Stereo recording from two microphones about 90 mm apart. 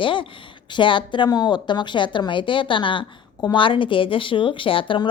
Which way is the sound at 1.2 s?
50° left (ahead or behind).